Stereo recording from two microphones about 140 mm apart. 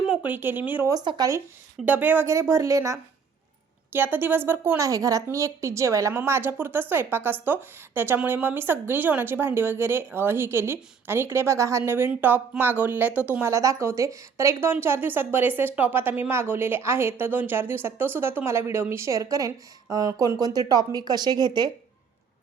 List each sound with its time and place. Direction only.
0.1 s speech: 10° right (ahead or behind)
0.9 s speech: 30° right (ahead or behind)
1.8 s a woman's voice: 10° right (ahead or behind); by 21.7 s 30° right (ahead or behind)